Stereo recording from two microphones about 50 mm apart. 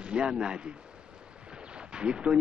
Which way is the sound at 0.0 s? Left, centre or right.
Centre.